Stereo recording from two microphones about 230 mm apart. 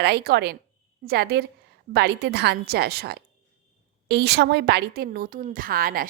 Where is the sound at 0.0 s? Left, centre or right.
Right.